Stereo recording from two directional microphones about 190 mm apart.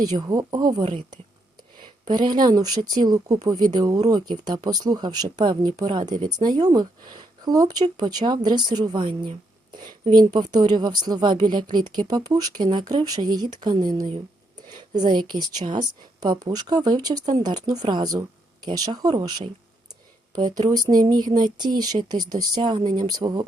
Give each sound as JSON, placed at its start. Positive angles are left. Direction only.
{"t": 0.0, "sound": "a woman's voice", "side_deg": -20}